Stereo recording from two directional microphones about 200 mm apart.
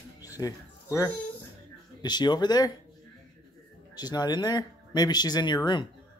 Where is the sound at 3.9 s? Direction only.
20° left (ahead or behind).